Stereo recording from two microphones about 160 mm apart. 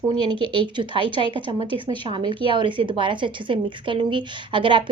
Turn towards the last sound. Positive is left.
turn(degrees=-30)  # may be behind; listen again after turning